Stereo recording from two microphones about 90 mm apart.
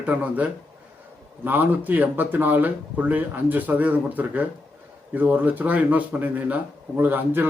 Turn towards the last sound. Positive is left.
turn(degrees=-20)  # may be behind; listen again after turning